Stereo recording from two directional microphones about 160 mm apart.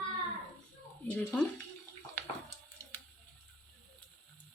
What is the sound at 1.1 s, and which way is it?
Speech, 5° left (ahead or behind).